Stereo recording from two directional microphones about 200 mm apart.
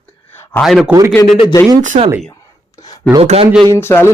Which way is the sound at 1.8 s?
40° right (ahead or behind).